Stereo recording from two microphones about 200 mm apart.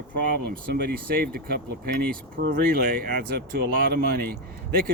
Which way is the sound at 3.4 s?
50° right (ahead or behind).